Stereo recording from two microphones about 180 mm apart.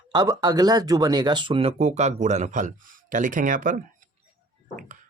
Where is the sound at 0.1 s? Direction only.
20° right (ahead or behind).